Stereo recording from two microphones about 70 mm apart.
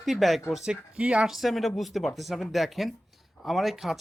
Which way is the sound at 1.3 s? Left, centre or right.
Centre.